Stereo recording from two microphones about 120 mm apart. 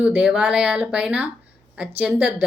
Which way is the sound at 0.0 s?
10° right (ahead or behind).